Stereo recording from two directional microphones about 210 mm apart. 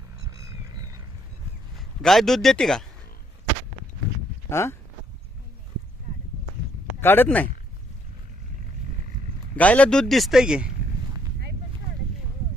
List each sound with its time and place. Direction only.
0.3 s a sound: 15° right (ahead or behind)
2.0 s speech: centre (ahead or behind)
4.4 s speech: 10° left (ahead or behind)
7.0 s speech: 10° left (ahead or behind)
9.6 s speech: 5° left (ahead or behind)